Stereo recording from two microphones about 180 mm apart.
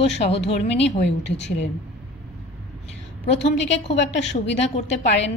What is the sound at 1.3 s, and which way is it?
Speech, 75° left (ahead or behind).